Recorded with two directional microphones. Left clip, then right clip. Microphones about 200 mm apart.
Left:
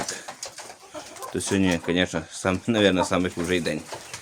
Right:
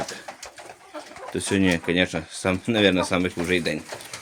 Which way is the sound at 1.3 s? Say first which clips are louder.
Right 2 dB; 5° right (ahead or behind).